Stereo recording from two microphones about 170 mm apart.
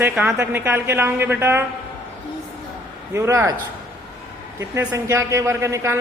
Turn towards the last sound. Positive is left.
turn(degrees=-15)  # may be behind; listen again after turning